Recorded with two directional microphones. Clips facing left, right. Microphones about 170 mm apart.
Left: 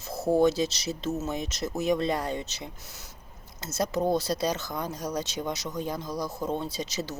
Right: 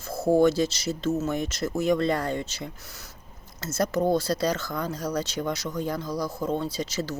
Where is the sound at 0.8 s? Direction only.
20° left (ahead or behind).